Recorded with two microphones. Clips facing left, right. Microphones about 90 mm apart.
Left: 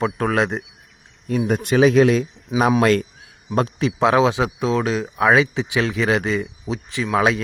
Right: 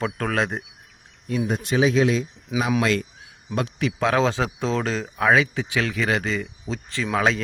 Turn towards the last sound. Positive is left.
turn(degrees=15)  # may be behind; listen again after turning